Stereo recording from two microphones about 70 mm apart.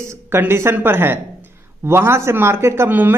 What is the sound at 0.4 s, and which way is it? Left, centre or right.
Speech, right.